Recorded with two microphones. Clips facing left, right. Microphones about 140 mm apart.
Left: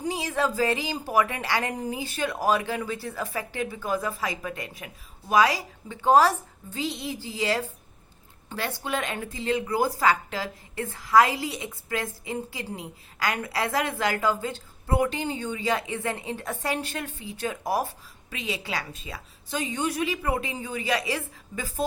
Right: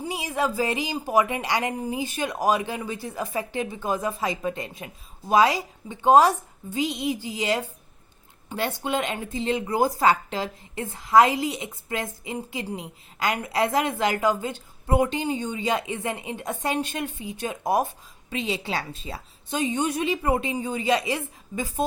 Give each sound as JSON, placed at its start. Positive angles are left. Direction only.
{"t": 0.0, "sound": "a woman's voice", "side_deg": -10}